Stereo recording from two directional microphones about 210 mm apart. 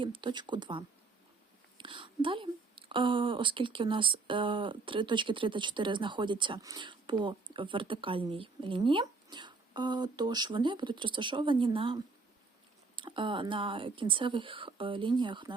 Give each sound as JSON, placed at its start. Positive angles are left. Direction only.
{"t": 0.0, "sound": "speech", "side_deg": -20}